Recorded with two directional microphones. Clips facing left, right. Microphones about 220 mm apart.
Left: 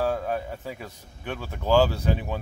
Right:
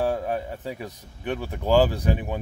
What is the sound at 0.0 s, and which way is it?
Speech, 15° right (ahead or behind).